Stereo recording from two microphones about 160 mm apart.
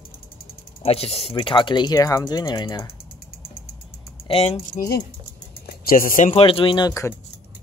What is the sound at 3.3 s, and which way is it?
Vehicle, 70° left (ahead or behind).